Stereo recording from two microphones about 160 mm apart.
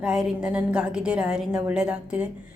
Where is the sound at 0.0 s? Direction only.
5° right (ahead or behind).